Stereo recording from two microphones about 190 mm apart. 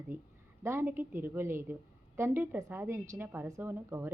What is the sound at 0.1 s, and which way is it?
Speech, 45° right (ahead or behind).